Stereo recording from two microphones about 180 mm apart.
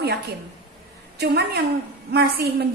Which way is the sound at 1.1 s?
65° right (ahead or behind).